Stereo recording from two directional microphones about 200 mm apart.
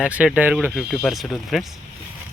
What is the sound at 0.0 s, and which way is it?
Speech, 5° right (ahead or behind).